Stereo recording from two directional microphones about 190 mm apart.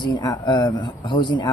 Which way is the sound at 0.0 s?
20° left (ahead or behind).